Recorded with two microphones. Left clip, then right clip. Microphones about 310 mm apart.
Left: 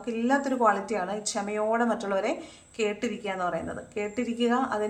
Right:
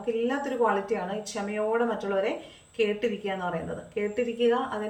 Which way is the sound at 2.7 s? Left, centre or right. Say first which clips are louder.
Right 3 dB; centre.